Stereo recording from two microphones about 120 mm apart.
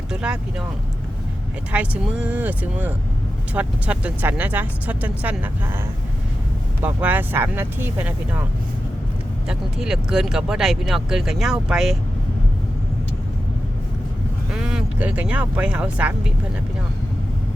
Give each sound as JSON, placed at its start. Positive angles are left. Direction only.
{"t": 0.1, "sound": "vehicle", "side_deg": -10}
{"t": 1.7, "sound": "speech", "side_deg": -10}
{"t": 6.8, "sound": "speech", "side_deg": -15}
{"t": 9.5, "sound": "speech", "side_deg": -5}
{"t": 14.5, "sound": "speech", "side_deg": -5}